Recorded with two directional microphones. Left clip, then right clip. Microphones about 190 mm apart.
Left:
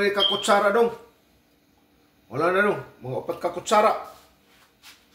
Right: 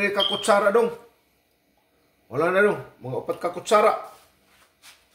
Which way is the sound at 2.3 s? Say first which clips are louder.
Right 1 dB; 40° right (ahead or behind).